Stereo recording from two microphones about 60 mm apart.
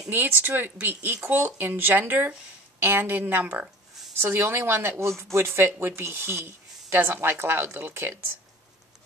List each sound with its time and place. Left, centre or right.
0.1 s speech: right